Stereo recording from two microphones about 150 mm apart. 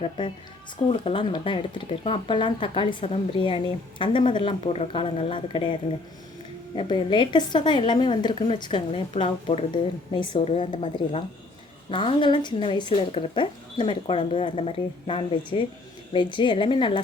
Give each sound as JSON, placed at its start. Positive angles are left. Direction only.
{"t": 0.0, "sound": "speech", "side_deg": 40}
{"t": 6.7, "sound": "speech", "side_deg": 35}